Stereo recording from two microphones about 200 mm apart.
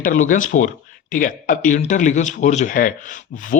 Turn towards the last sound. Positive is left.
turn(degrees=40)  # may be behind; listen again after turning